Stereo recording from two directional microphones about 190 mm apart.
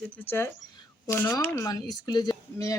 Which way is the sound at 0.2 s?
10° left (ahead or behind).